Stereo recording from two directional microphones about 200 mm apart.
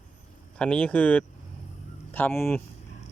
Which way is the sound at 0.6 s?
5° left (ahead or behind).